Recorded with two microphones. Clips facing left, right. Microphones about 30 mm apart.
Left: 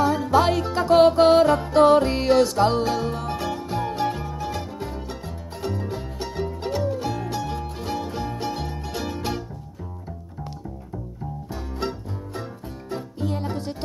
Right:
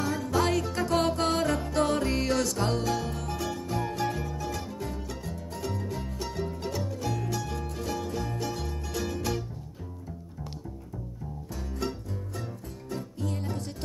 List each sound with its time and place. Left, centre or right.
0.0 s music: left
11.8 s music: left